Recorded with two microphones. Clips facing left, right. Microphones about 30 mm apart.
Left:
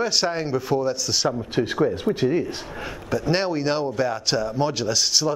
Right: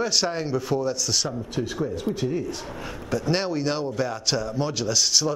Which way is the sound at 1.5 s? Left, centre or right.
Left.